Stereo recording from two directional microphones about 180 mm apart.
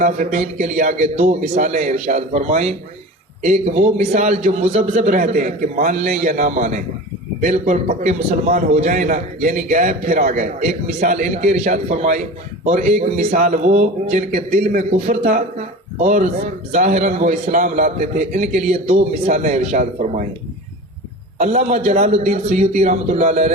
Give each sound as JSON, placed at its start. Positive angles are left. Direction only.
{"t": 0.0, "sound": "a man's voice", "side_deg": -45}
{"t": 21.4, "sound": "a man's voice", "side_deg": -45}